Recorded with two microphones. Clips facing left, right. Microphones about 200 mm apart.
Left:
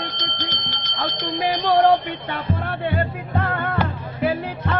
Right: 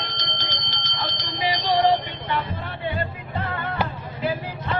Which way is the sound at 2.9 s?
55° left (ahead or behind).